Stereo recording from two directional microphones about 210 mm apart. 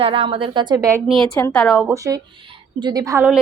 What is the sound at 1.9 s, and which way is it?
Speech, 15° right (ahead or behind).